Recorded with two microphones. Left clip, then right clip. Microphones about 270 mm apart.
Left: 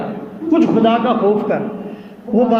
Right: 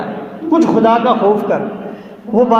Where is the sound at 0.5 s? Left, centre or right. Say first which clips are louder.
Right 3 dB; centre.